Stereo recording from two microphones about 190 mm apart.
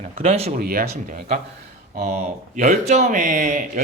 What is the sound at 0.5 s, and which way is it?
Speech, 50° right (ahead or behind).